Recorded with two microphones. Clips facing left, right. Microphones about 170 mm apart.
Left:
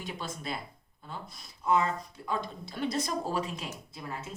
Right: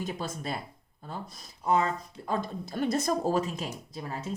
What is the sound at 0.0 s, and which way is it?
Speech, 45° right (ahead or behind).